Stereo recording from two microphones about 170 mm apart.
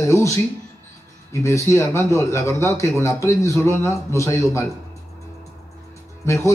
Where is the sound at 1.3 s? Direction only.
15° left (ahead or behind).